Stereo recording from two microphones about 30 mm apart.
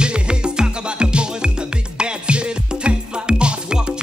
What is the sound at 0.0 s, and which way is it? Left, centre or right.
Music, right.